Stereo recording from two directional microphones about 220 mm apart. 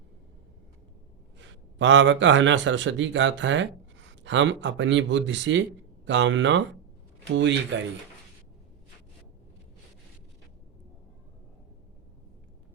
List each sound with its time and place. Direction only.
1.4 s a man's voice: 55° right (ahead or behind)